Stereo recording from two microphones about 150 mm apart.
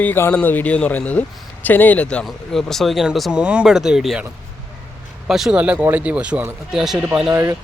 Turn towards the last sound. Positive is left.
turn(degrees=-5)  # may be behind; listen again after turning